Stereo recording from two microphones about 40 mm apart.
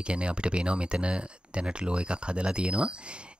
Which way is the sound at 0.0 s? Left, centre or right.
Right.